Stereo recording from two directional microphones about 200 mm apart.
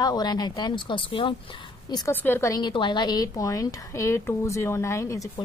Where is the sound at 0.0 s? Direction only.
20° left (ahead or behind).